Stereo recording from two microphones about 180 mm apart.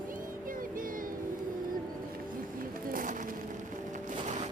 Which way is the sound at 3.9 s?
45° right (ahead or behind).